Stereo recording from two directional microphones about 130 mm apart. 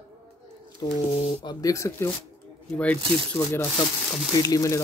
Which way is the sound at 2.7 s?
10° left (ahead or behind).